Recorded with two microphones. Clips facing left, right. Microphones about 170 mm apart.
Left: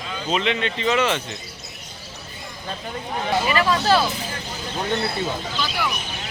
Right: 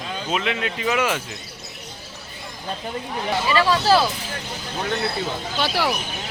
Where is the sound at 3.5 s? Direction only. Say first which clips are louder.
Right 3 dB; 30° right (ahead or behind).